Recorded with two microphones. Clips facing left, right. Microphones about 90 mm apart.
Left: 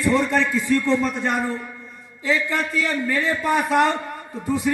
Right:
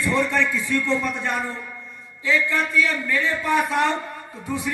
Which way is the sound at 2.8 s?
35° left (ahead or behind).